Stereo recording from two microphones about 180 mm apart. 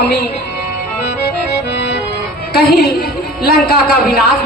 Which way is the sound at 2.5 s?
60° left (ahead or behind).